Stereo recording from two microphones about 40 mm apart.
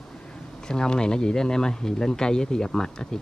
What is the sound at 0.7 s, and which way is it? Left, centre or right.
Speech, centre.